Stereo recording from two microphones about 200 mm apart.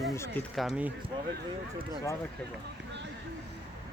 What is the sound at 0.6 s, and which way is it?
Speech, 5° right (ahead or behind).